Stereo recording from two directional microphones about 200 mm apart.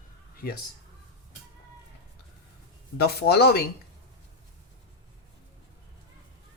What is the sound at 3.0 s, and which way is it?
Speech, 55° left (ahead or behind).